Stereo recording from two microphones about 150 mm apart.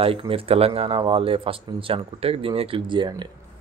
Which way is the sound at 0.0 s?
40° right (ahead or behind).